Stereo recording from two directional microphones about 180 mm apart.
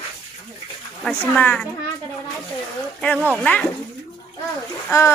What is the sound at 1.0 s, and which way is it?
Speech, 5° left (ahead or behind).